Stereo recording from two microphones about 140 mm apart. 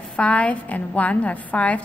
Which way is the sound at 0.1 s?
10° left (ahead or behind).